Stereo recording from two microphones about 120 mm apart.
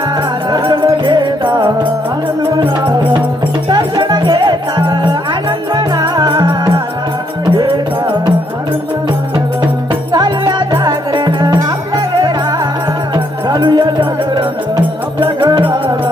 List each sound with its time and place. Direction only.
0.5 s music: 40° right (ahead or behind)
3.7 s music: 35° right (ahead or behind)
10.1 s music: 40° right (ahead or behind)
13.5 s music: 40° right (ahead or behind)